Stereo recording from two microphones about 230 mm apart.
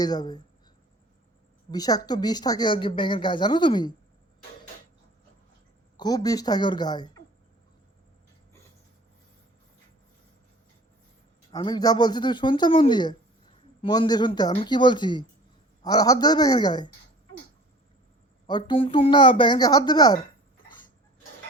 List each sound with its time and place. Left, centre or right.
0.0 s a woman's voice: centre
1.7 s speech: centre
6.0 s a woman's voice: centre
11.5 s a woman's voice: centre
18.4 s speech: centre